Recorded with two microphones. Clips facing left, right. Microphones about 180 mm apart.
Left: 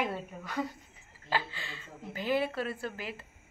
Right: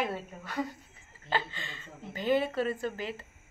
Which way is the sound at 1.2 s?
5° left (ahead or behind).